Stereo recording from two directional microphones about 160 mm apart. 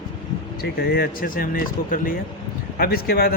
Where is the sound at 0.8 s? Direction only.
75° left (ahead or behind).